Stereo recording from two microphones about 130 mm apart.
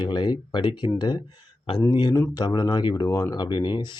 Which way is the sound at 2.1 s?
25° left (ahead or behind).